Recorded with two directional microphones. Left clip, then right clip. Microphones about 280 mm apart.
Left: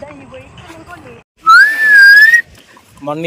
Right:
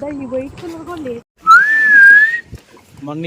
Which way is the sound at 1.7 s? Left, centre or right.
Left.